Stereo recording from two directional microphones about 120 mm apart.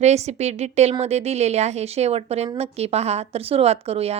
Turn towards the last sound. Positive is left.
turn(degrees=-55)  # may be behind; listen again after turning